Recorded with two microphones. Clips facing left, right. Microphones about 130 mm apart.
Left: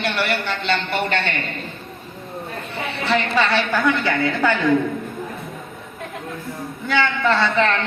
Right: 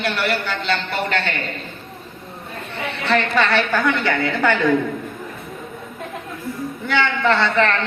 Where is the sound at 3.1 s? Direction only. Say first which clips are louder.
Right 1 dB; 15° left (ahead or behind).